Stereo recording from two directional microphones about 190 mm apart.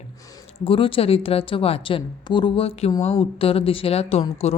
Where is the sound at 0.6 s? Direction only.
30° left (ahead or behind).